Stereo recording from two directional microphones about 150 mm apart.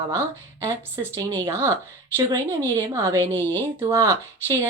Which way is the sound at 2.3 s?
20° right (ahead or behind).